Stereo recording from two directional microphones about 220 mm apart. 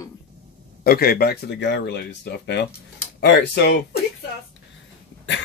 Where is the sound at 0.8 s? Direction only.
45° left (ahead or behind).